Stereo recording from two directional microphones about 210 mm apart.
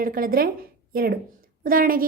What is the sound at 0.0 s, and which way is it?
A woman's voice, 45° right (ahead or behind).